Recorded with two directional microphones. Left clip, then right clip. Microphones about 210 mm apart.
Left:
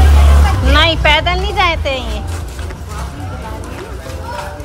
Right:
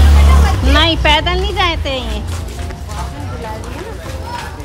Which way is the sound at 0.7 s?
20° right (ahead or behind).